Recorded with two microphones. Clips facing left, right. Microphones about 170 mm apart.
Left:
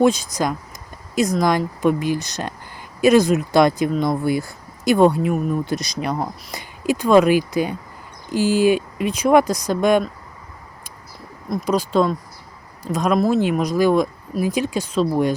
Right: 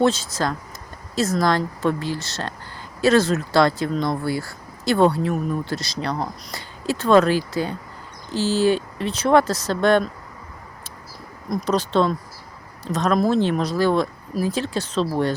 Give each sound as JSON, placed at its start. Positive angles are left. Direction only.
{"t": 0.0, "sound": "speech", "side_deg": 15}
{"t": 11.4, "sound": "speech", "side_deg": 5}